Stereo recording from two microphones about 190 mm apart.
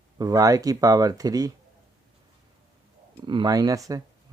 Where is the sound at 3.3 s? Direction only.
25° right (ahead or behind).